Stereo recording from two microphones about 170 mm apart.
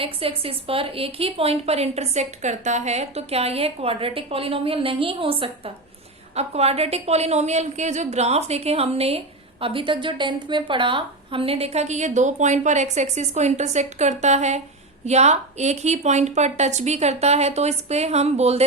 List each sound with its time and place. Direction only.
0.0 s a woman's voice: 35° right (ahead or behind)